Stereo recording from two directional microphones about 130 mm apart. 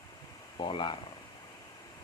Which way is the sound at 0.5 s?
40° left (ahead or behind).